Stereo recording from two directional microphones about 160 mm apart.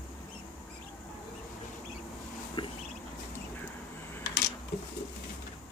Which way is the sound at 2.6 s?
30° left (ahead or behind).